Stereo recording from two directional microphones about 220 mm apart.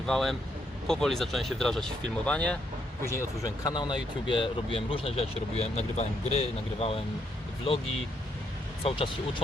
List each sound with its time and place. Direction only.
0.0 s speech: centre (ahead or behind); by 7.0 s 25° left (ahead or behind)
8.8 s speech: 25° left (ahead or behind)